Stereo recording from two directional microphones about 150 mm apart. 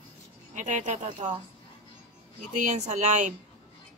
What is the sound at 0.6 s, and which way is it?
Speech, 55° right (ahead or behind).